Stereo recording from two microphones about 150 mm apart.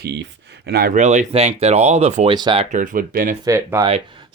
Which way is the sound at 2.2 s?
30° right (ahead or behind).